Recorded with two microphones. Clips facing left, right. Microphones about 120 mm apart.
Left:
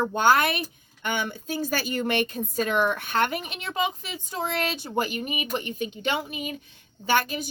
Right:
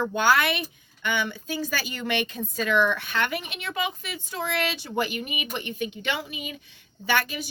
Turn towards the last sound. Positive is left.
turn(degrees=40)  # may be behind; listen again after turning